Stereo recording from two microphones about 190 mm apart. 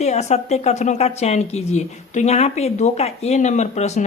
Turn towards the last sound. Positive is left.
turn(degrees=35)  # may be behind; listen again after turning